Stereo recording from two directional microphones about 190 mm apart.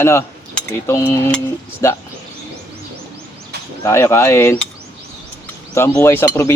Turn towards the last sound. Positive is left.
turn(degrees=15)  # may be behind; listen again after turning